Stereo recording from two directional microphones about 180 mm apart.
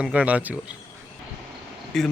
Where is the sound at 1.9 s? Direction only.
Centre (ahead or behind).